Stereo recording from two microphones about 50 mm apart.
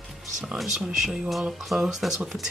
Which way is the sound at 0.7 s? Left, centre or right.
Centre.